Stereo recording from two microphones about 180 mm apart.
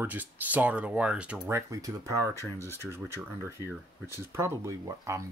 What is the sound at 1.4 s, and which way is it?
Speech, 20° right (ahead or behind).